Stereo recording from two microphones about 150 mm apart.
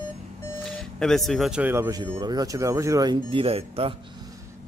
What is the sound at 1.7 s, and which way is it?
Speech, 20° right (ahead or behind).